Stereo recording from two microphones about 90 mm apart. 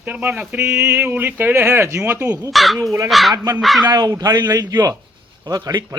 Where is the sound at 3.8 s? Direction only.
50° right (ahead or behind).